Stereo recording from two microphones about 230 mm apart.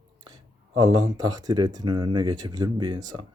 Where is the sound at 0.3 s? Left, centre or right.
Centre.